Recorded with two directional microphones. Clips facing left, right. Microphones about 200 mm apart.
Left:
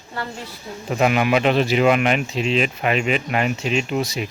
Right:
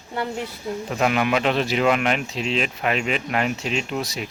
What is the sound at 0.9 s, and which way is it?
Speech, 5° left (ahead or behind).